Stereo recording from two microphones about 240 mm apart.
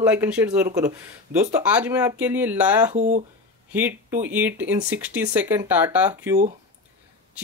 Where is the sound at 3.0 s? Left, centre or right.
Right.